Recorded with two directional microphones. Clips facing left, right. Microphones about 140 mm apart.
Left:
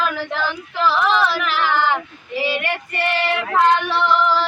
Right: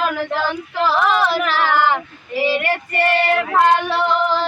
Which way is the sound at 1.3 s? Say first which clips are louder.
Right 3 dB; 45° right (ahead or behind).